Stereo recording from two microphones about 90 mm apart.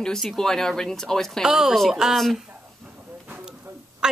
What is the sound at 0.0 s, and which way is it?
A woman's voice, 5° left (ahead or behind).